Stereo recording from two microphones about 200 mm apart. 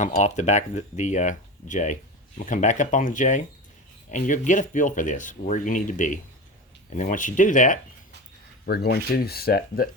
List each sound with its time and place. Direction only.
0.2 s speech: 35° left (ahead or behind)
8.6 s speech: 55° left (ahead or behind)